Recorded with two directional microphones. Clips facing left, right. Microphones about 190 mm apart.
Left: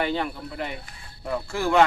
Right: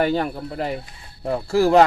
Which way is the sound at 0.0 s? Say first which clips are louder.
Right 5 dB; 45° right (ahead or behind).